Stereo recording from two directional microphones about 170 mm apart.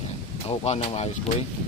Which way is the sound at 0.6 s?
40° left (ahead or behind).